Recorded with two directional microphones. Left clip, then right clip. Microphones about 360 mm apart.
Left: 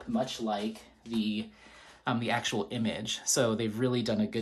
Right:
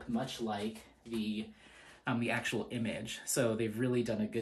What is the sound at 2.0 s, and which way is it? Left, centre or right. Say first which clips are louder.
Speech: left 4 dB; centre.